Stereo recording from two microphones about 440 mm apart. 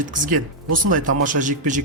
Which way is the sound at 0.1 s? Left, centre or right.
Centre.